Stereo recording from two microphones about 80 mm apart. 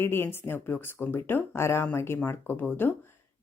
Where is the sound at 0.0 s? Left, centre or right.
Left.